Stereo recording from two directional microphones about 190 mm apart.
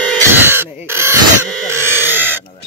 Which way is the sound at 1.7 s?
10° right (ahead or behind).